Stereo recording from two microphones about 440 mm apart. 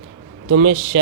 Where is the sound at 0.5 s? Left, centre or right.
Right.